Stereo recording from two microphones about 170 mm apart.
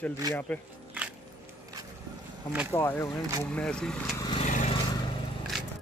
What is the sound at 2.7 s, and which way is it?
Speech, 15° left (ahead or behind).